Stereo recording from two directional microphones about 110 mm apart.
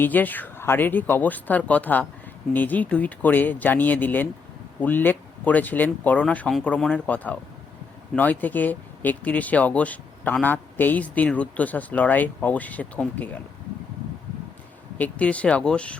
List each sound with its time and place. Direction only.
0.0 s speech: 15° left (ahead or behind)
14.9 s speech: 15° left (ahead or behind)